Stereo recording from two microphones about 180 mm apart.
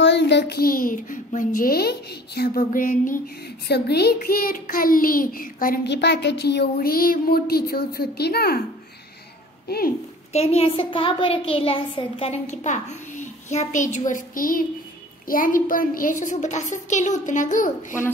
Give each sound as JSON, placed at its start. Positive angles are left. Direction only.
{"t": 0.0, "sound": "a child's voice", "side_deg": 75}
{"t": 3.6, "sound": "a child's voice", "side_deg": 65}
{"t": 5.9, "sound": "speech", "side_deg": 70}
{"t": 9.7, "sound": "a child's voice", "side_deg": 55}
{"t": 10.3, "sound": "a sound", "side_deg": 35}
{"t": 15.2, "sound": "a child's voice", "side_deg": 50}